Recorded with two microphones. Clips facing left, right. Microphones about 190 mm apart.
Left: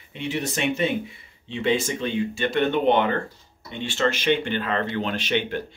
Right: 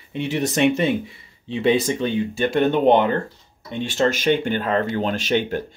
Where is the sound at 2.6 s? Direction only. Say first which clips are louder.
Right 4 dB; 40° right (ahead or behind).